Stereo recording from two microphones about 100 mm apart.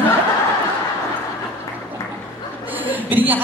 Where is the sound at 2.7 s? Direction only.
15° right (ahead or behind).